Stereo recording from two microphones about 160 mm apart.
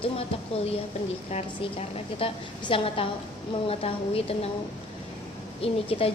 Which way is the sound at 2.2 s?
35° left (ahead or behind).